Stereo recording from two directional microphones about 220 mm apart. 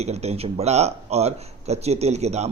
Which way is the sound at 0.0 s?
30° right (ahead or behind).